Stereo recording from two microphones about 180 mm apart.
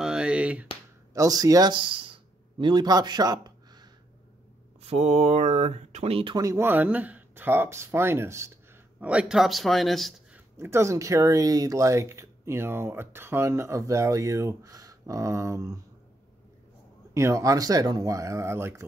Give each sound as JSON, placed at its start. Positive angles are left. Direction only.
{"t": 0.0, "sound": "a sound", "side_deg": -5}
{"t": 1.1, "sound": "speech", "side_deg": -20}
{"t": 4.8, "sound": "speech", "side_deg": -35}
{"t": 9.0, "sound": "a man's voice", "side_deg": -5}
{"t": 10.6, "sound": "speech", "side_deg": -15}
{"t": 17.1, "sound": "speech", "side_deg": -15}